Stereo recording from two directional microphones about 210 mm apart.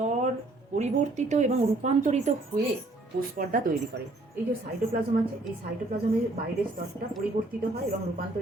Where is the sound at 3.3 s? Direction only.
40° right (ahead or behind).